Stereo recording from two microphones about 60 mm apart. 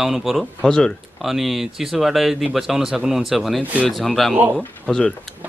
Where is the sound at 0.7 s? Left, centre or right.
Centre.